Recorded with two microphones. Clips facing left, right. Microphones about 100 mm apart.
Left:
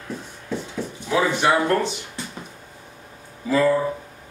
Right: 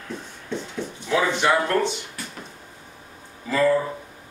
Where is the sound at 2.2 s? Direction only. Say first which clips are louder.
Left 3 dB; 25° left (ahead or behind).